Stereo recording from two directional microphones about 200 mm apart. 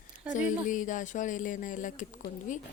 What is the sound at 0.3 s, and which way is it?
Speech, 40° left (ahead or behind).